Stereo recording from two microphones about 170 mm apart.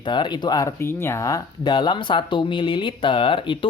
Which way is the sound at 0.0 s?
25° left (ahead or behind).